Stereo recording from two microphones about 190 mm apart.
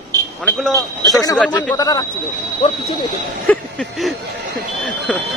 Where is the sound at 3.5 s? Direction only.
5° left (ahead or behind).